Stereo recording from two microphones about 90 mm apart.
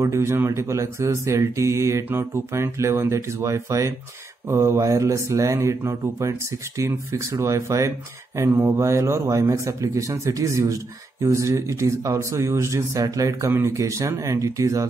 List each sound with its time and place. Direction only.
0.0 s a man's voice: 30° right (ahead or behind)